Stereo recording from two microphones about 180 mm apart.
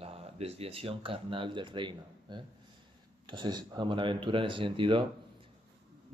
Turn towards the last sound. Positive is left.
turn(degrees=-25)  # may be behind; listen again after turning